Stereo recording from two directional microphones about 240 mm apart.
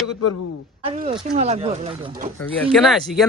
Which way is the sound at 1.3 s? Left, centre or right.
Right.